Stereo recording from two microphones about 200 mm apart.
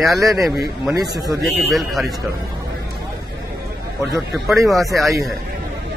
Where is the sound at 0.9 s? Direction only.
20° right (ahead or behind).